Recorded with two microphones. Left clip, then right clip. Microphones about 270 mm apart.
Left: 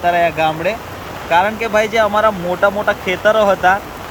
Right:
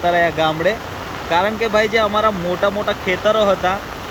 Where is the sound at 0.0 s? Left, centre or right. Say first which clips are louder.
Left 2 dB; centre.